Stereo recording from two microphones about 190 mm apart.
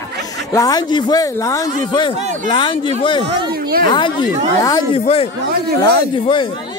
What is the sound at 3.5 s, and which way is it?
Speech, 50° right (ahead or behind).